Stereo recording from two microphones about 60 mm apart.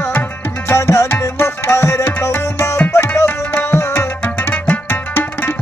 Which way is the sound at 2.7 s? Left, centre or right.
Left.